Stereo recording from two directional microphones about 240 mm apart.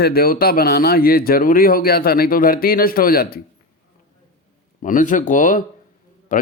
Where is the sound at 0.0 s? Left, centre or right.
Left.